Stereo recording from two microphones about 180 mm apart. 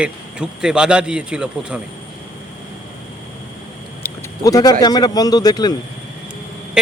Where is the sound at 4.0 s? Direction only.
20° left (ahead or behind).